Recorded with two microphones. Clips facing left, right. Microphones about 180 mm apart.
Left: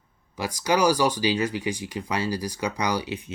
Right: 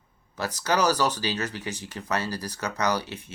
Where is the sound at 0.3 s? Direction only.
15° left (ahead or behind).